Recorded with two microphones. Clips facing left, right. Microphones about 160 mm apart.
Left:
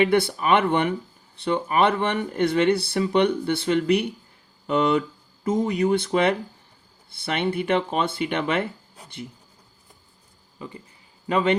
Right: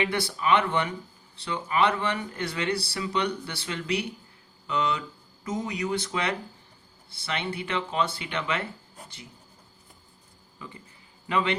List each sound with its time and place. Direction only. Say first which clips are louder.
0.0 s speech: left 7 dB; 55° left (ahead or behind)
11.3 s a man's voice: left 5 dB; 40° left (ahead or behind)